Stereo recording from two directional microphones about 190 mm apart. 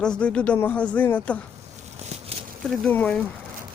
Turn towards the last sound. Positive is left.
turn(degrees=5)  # may be behind; listen again after turning